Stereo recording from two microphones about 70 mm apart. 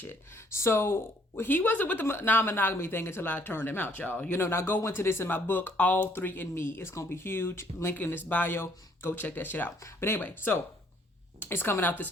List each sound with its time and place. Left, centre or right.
0.0 s speech: left
7.9 s speech: left